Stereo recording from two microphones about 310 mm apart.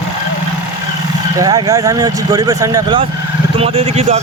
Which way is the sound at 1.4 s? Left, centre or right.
Centre.